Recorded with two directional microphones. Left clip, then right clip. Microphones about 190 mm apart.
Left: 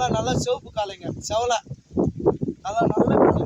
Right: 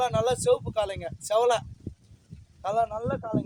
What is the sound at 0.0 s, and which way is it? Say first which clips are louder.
Speech: left 1 dB; 20° right (ahead or behind).